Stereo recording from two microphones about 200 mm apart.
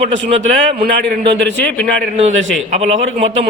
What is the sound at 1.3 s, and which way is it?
Speech, 60° right (ahead or behind).